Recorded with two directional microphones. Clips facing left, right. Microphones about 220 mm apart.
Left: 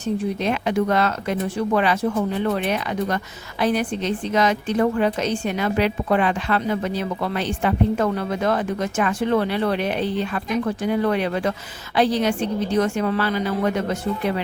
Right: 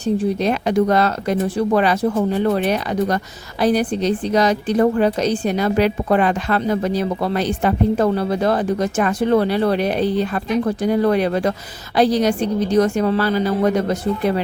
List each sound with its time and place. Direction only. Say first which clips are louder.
0.0 s a woman's voice: right 5 dB; 35° right (ahead or behind)